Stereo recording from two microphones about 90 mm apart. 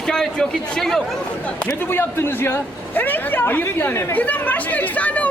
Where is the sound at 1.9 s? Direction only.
25° left (ahead or behind).